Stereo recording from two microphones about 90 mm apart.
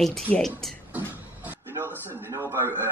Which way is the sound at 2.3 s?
30° right (ahead or behind).